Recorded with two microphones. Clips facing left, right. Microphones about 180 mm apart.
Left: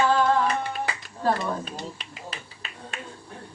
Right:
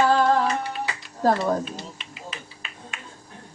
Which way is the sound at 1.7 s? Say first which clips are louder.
Left 1 dB; 40° left (ahead or behind).